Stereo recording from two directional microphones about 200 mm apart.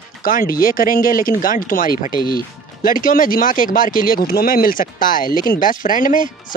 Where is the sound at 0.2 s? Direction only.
45° left (ahead or behind).